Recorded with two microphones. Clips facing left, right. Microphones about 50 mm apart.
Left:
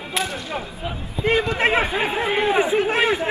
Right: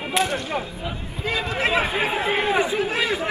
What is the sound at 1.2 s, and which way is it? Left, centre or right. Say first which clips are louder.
Speech: left 4 dB; left.